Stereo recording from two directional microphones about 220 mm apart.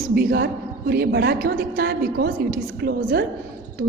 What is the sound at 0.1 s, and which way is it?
A woman's voice, 45° right (ahead or behind).